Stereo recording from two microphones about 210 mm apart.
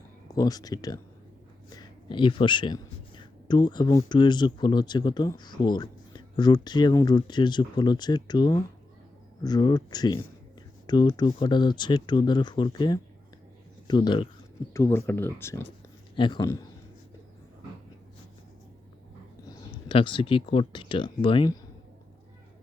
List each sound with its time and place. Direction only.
0.3 s speech: 15° left (ahead or behind)
2.0 s speech: 25° left (ahead or behind)
14.7 s speech: 10° left (ahead or behind)
16.1 s speech: 20° left (ahead or behind)
19.5 s speech: 25° left (ahead or behind)